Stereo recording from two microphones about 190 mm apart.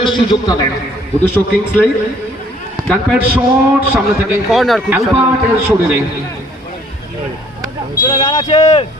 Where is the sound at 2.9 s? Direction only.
5° right (ahead or behind).